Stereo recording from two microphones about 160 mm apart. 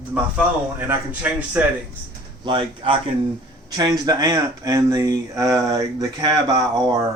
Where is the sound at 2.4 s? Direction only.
30° right (ahead or behind).